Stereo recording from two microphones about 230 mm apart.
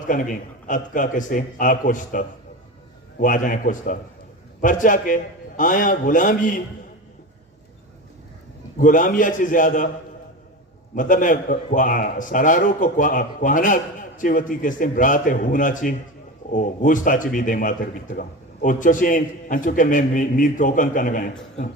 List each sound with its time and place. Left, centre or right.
0.1 s a man's voice: left
8.8 s a man's voice: left
10.9 s a man's voice: left